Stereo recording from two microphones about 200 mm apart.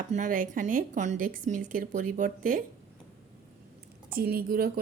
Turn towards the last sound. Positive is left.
turn(degrees=-50)  # may be behind; listen again after turning